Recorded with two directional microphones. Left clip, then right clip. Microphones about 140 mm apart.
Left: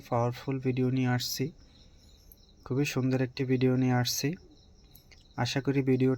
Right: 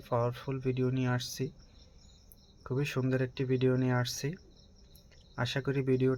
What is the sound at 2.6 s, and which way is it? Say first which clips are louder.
Speech: left 3 dB; 25° left (ahead or behind).